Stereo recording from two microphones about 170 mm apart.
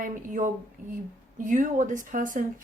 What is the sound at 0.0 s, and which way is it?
Speech, 50° right (ahead or behind).